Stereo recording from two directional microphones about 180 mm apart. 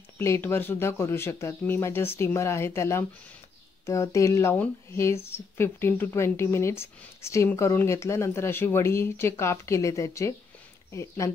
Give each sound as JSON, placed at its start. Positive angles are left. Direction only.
{"t": 0.2, "sound": "speech", "side_deg": 15}